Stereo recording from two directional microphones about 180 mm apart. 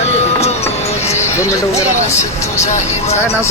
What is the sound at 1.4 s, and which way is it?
Speech, 15° left (ahead or behind).